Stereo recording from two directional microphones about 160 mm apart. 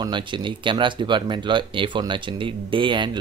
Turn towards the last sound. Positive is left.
turn(degrees=-30)  # may be behind; listen again after turning